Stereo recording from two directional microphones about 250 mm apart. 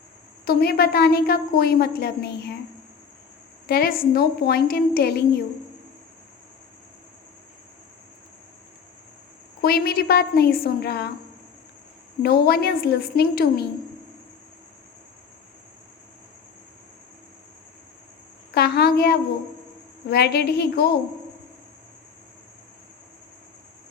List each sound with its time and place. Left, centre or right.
0.4 s a woman's voice: left
3.7 s a woman's voice: left
9.6 s a woman's voice: left
12.2 s a woman's voice: left
18.5 s a woman's voice: left